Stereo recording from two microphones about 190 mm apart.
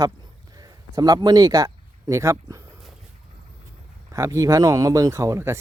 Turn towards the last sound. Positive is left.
turn(degrees=-15)  # may be behind; listen again after turning